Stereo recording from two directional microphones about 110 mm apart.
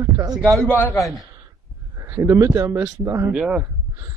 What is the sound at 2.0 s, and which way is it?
A man's voice, 20° right (ahead or behind).